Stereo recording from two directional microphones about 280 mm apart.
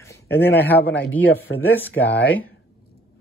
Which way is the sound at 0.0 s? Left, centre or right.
Centre.